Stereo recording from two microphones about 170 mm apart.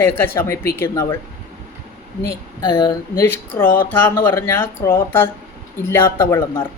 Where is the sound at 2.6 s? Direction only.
25° left (ahead or behind).